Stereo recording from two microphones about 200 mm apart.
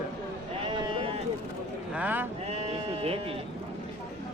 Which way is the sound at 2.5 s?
30° right (ahead or behind).